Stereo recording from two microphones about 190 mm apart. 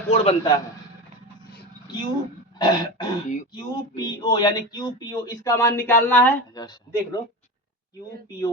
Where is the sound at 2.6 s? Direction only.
20° left (ahead or behind).